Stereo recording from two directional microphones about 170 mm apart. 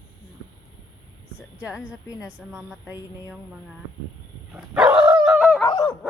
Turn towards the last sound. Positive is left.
turn(degrees=25)  # may be behind; listen again after turning